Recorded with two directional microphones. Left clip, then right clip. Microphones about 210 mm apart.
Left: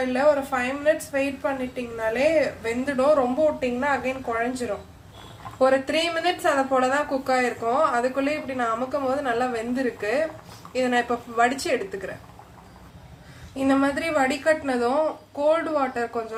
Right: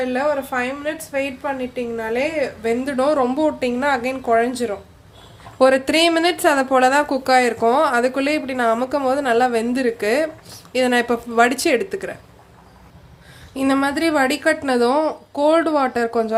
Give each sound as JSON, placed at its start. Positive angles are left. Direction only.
{"t": 0.1, "sound": "a woman's voice", "side_deg": -30}
{"t": 13.6, "sound": "a woman's voice", "side_deg": -45}